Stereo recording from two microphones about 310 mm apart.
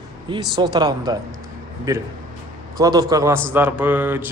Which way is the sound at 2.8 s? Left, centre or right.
Centre.